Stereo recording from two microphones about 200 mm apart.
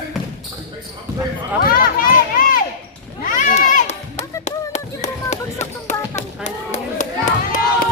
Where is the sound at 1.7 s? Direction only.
45° left (ahead or behind).